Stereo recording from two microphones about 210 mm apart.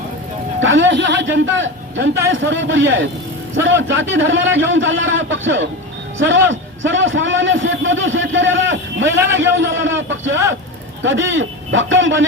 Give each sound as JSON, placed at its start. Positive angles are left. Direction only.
{"t": 0.6, "sound": "a man's voice", "side_deg": -65}